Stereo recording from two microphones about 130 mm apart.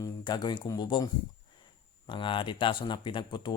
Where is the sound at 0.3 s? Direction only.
35° left (ahead or behind).